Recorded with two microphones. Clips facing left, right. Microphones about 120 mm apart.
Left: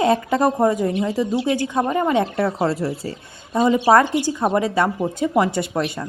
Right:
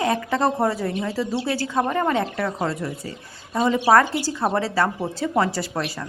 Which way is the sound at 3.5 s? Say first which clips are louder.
Left 2 dB; 15° left (ahead or behind).